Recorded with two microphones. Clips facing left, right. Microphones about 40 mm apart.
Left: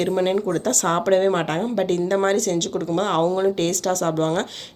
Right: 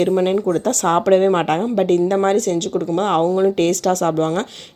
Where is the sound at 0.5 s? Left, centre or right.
Right.